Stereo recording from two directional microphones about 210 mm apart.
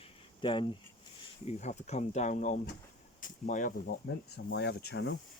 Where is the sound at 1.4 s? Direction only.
35° left (ahead or behind).